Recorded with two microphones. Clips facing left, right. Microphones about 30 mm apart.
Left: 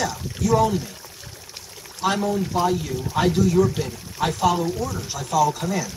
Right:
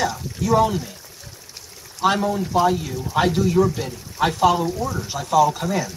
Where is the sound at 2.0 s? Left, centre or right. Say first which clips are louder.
Right 3 dB; centre.